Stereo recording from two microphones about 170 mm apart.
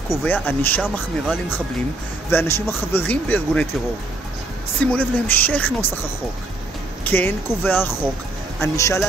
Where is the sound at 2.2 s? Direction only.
15° left (ahead or behind).